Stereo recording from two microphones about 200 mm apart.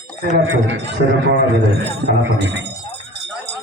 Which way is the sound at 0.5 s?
65° right (ahead or behind).